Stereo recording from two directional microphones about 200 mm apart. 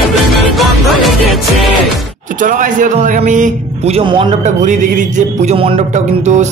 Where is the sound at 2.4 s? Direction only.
40° right (ahead or behind).